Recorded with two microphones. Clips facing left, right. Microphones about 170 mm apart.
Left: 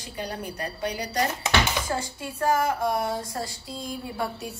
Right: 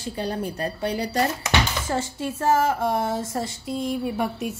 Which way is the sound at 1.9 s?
25° right (ahead or behind).